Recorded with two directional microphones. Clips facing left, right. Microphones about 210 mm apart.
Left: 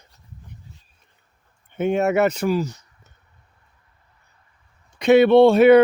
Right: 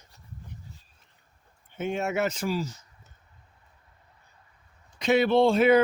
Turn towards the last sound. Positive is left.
turn(degrees=65)  # may be behind; listen again after turning